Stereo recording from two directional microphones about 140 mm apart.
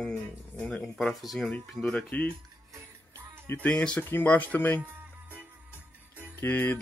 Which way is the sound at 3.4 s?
15° left (ahead or behind).